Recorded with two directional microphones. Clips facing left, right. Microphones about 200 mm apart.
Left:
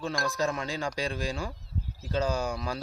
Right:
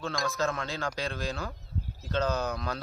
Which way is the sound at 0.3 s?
15° left (ahead or behind).